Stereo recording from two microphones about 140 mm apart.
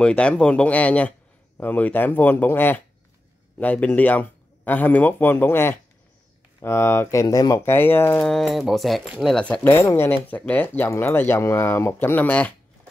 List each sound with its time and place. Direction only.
0.0 s speech: 10° left (ahead or behind)
8.3 s speech: centre (ahead or behind)